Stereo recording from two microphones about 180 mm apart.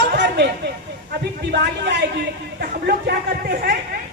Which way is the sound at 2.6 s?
55° right (ahead or behind).